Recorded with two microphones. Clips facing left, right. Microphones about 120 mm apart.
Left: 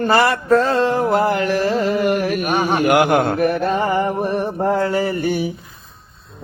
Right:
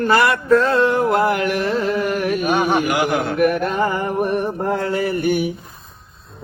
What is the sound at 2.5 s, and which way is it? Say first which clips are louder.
Speech: right 2 dB; centre (ahead or behind).